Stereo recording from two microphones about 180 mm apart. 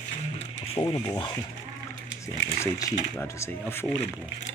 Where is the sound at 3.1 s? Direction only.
10° left (ahead or behind).